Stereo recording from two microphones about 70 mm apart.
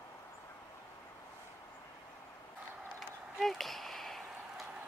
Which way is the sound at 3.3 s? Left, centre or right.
Centre.